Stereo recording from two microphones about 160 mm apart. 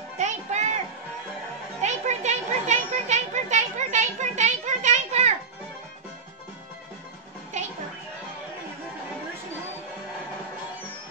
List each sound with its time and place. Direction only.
0.2 s music: 45° right (ahead or behind)
1.8 s children playing: 45° right (ahead or behind)